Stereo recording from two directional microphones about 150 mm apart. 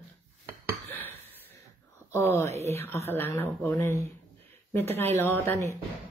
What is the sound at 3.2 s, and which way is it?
Speech, 15° left (ahead or behind).